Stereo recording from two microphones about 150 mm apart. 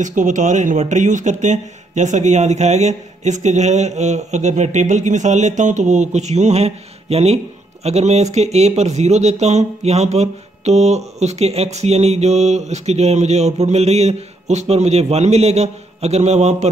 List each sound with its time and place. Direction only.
0.0 s speech: 55° right (ahead or behind)